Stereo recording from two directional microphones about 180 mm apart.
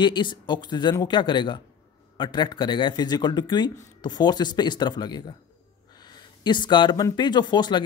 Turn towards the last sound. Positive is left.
turn(degrees=25)  # may be behind; listen again after turning